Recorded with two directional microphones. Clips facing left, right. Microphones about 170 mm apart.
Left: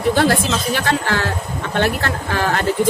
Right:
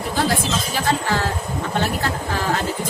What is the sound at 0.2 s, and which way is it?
Speech, 70° left (ahead or behind).